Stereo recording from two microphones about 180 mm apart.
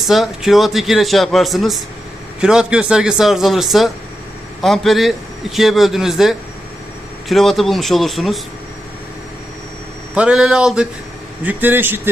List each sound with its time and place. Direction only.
0.1 s a man's voice: centre (ahead or behind)
10.2 s a man's voice: 5° right (ahead or behind)